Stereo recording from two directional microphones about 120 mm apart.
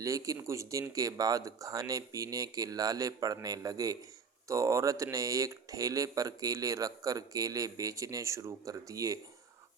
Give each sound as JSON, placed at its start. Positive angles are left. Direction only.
{"t": 0.0, "sound": "speech", "side_deg": -25}